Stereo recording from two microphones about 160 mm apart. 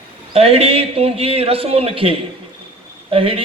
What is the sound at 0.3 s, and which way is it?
A man's voice, 40° right (ahead or behind).